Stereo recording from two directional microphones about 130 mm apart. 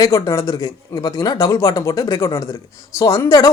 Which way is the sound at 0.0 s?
25° left (ahead or behind).